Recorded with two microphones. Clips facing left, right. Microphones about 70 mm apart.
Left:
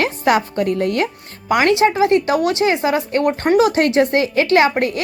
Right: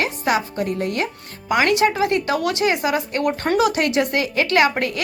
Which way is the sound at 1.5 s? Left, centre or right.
Left.